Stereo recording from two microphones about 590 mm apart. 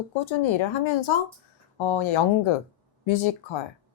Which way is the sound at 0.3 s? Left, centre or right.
Left.